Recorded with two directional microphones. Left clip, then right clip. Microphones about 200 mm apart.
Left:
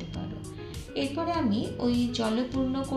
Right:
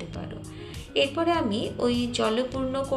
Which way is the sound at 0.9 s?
15° right (ahead or behind).